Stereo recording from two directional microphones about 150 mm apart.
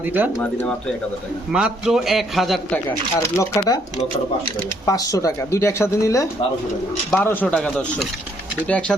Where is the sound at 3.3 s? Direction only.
20° left (ahead or behind).